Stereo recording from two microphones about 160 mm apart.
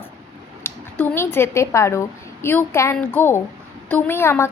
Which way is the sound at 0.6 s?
10° left (ahead or behind).